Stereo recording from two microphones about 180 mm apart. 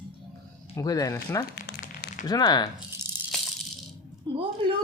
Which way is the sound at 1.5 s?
65° left (ahead or behind).